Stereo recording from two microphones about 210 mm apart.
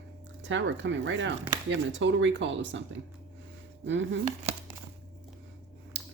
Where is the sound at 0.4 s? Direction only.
60° right (ahead or behind).